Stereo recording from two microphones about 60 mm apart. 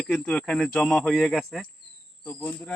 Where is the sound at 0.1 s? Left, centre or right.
Centre.